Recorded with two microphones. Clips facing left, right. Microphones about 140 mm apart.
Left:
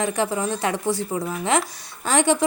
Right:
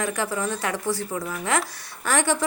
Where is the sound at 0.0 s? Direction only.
20° left (ahead or behind).